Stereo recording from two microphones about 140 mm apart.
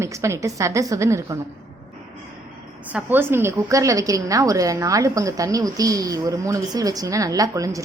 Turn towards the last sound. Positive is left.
turn(degrees=-25)  # may be behind; listen again after turning